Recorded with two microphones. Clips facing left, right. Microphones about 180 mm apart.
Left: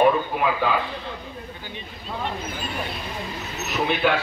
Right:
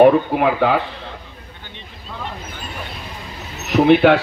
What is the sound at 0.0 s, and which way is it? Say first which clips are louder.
Speech: right 7 dB; 65° right (ahead or behind).